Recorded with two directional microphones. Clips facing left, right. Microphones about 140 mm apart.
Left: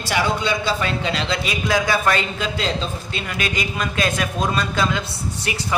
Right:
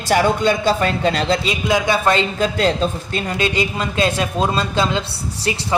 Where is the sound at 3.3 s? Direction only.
25° right (ahead or behind).